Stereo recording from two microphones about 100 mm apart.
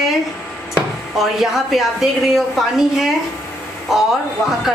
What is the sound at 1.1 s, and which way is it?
A woman's voice, centre (ahead or behind).